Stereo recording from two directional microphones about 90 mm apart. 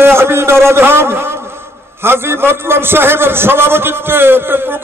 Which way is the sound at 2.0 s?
25° right (ahead or behind).